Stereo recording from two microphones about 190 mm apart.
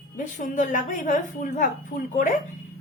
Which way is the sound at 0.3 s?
45° left (ahead or behind).